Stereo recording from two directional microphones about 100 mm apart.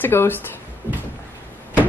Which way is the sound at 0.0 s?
20° left (ahead or behind).